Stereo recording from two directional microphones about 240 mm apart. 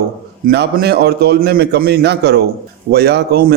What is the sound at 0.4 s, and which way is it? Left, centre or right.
A man's voice, right.